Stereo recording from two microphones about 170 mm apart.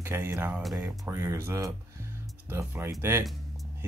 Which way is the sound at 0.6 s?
Centre (ahead or behind).